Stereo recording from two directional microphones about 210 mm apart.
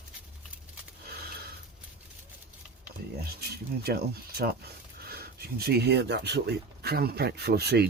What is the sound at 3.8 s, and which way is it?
Speech, 45° right (ahead or behind).